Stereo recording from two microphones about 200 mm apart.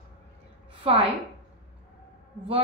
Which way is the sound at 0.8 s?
30° right (ahead or behind).